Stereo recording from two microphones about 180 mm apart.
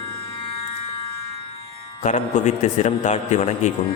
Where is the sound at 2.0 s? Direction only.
40° left (ahead or behind).